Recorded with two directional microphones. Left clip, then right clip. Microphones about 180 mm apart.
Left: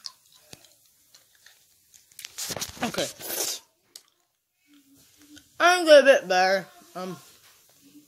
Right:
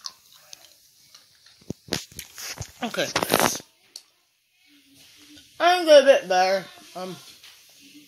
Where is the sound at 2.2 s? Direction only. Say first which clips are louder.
Even; centre (ahead or behind).